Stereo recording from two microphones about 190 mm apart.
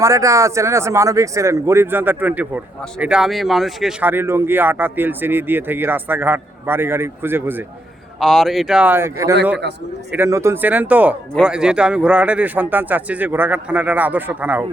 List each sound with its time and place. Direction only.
0.0 s speech: 15° right (ahead or behind)
8.2 s speech: centre (ahead or behind)